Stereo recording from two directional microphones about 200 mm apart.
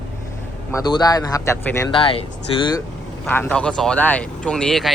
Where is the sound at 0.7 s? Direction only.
20° left (ahead or behind).